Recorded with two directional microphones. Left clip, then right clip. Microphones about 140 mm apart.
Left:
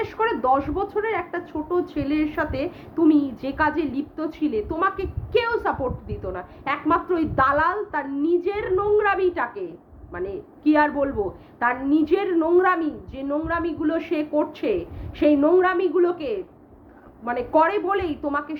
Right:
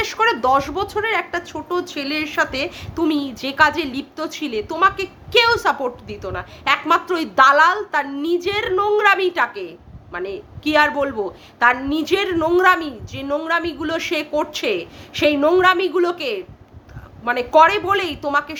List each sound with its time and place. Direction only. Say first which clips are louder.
0.0 s speech: right 5 dB; 20° right (ahead or behind)